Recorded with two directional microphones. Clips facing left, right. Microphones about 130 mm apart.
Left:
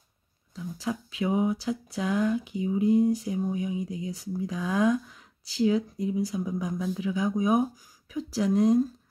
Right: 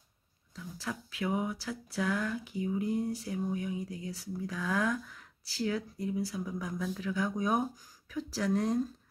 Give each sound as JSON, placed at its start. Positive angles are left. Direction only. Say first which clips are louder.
{"t": 0.6, "sound": "speech", "louder": "left 7 dB", "side_deg": 20}